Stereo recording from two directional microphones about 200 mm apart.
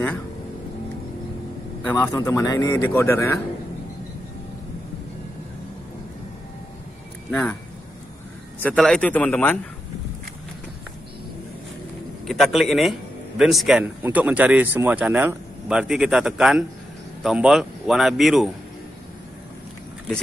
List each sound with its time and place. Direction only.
2.0 s speech: 15° left (ahead or behind)
7.2 s speech: 5° left (ahead or behind)
8.5 s speech: 5° left (ahead or behind)
12.3 s a man's voice: centre (ahead or behind)